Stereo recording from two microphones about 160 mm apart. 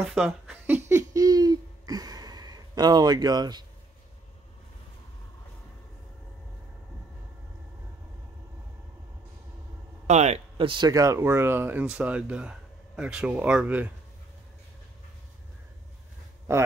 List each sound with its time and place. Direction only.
0.0 s a sound: 5° right (ahead or behind); by 3.6 s 25° right (ahead or behind)
10.0 s speech: 45° right (ahead or behind); by 13.9 s 10° right (ahead or behind)
16.5 s speech: 15° right (ahead or behind)